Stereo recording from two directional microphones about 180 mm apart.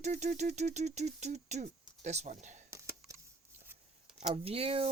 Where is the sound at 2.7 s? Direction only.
15° right (ahead or behind).